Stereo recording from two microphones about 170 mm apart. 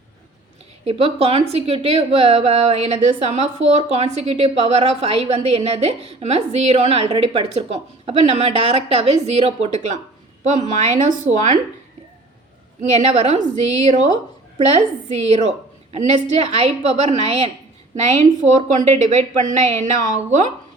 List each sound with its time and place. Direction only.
0.9 s a woman's voice: 35° right (ahead or behind)
12.8 s a woman's voice: 40° right (ahead or behind)